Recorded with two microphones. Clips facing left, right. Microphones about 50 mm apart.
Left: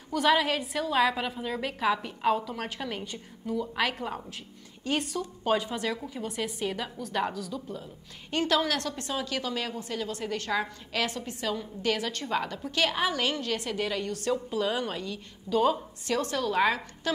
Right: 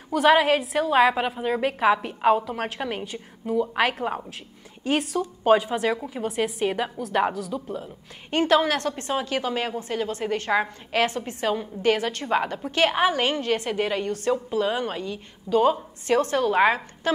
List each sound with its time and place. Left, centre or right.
0.1 s a woman's voice: right
5.1 s a woman's voice: centre
6.6 s a woman's voice: right